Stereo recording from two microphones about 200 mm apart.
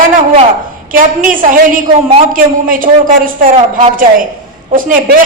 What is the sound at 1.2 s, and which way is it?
A woman's voice, 45° right (ahead or behind).